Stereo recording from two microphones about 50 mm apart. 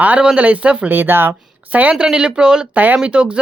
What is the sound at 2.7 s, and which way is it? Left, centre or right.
Speech, right.